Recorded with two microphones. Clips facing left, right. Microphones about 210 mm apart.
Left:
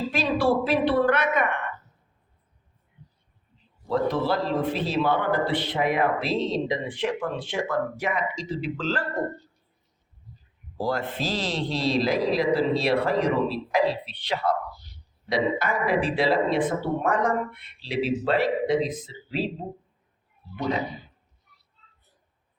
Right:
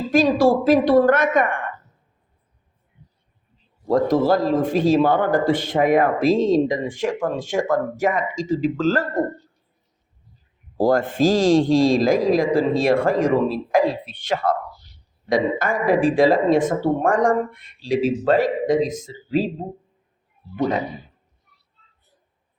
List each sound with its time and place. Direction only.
0.1 s a man's voice: 45° right (ahead or behind)
3.8 s a man's voice: 45° right (ahead or behind)
10.8 s a man's voice: 45° right (ahead or behind)